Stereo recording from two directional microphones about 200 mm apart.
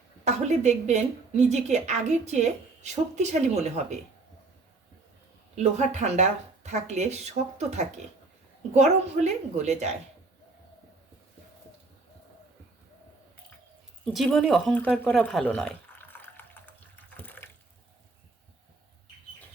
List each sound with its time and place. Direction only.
0.3 s a woman's voice: 35° right (ahead or behind)
5.5 s a woman's voice: 35° right (ahead or behind)
14.0 s speech: centre (ahead or behind)
17.2 s water: 10° left (ahead or behind)